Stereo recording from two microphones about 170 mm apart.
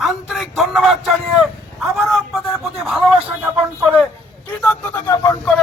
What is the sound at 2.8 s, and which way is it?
Speech, centre (ahead or behind).